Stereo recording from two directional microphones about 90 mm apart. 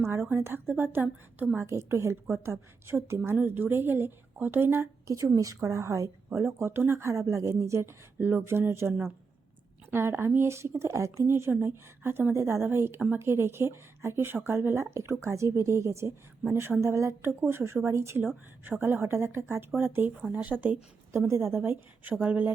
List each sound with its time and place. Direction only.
0.3 s speech: 25° right (ahead or behind)
1.5 s a woman's voice: 30° right (ahead or behind)
5.0 s a woman's voice: 35° right (ahead or behind)
9.9 s a woman's voice: 25° right (ahead or behind)
21.1 s speech: 30° right (ahead or behind)